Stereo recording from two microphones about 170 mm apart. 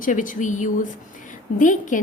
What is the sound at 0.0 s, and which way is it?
A woman's voice, 50° left (ahead or behind).